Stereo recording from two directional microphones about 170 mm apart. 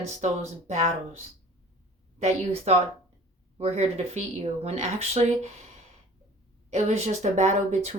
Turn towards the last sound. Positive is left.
turn(degrees=-45)  # may be behind; listen again after turning